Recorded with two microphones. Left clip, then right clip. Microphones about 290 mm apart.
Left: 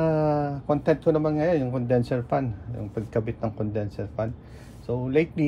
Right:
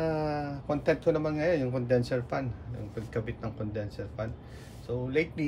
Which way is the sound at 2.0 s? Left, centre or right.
Centre.